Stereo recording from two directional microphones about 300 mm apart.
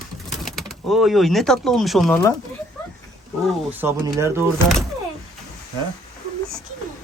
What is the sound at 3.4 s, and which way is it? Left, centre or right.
Speech, centre.